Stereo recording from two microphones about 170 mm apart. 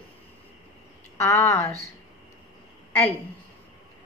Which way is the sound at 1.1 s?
15° left (ahead or behind).